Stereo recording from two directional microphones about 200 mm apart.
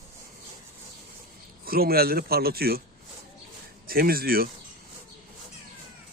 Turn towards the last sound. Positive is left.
turn(degrees=-50)  # may be behind; listen again after turning